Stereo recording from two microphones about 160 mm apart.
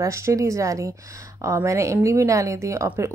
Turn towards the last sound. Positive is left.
turn(degrees=-20)  # may be behind; listen again after turning